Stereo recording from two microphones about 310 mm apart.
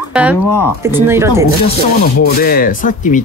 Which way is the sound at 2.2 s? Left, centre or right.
Left.